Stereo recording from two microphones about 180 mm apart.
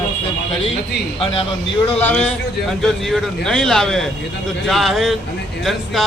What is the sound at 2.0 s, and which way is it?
A man's voice, 5° left (ahead or behind).